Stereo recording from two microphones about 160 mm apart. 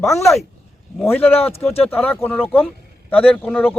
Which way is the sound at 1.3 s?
40° left (ahead or behind).